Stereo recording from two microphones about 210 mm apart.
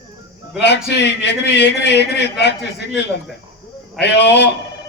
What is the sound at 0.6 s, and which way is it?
A man's voice, 55° left (ahead or behind).